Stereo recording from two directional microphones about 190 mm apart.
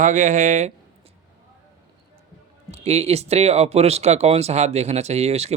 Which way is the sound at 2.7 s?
35° right (ahead or behind).